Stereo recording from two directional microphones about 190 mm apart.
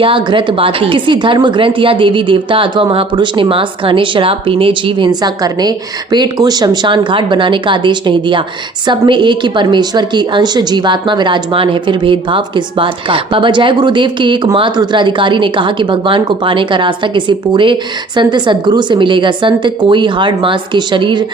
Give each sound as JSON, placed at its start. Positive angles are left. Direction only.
{"t": 0.0, "sound": "a woman's voice", "side_deg": -25}